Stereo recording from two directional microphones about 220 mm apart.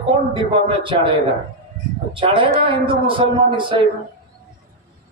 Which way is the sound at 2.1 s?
25° right (ahead or behind).